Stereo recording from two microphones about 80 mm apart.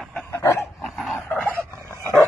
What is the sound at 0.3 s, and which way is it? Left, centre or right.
Dog, left.